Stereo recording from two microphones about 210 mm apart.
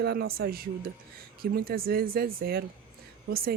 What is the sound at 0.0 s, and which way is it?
Speech, 50° right (ahead or behind).